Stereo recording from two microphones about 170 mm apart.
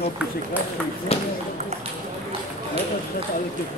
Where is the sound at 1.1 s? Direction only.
40° left (ahead or behind).